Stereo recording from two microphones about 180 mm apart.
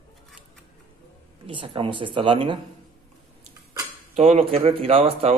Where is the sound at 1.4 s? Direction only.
30° right (ahead or behind).